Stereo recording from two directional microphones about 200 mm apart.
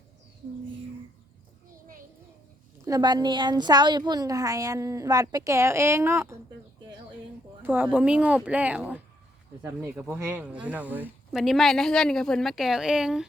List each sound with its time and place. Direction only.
2.8 s a woman's voice: 20° right (ahead or behind)
7.6 s a woman's voice: 10° right (ahead or behind)